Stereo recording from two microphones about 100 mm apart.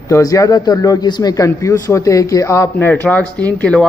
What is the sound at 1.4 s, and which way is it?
Speech, 30° left (ahead or behind).